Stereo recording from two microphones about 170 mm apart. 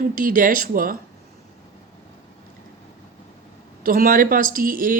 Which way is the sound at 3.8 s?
55° right (ahead or behind).